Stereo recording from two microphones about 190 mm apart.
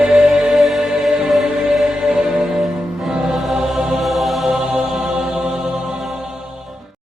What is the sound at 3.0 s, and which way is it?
Music, 5° right (ahead or behind).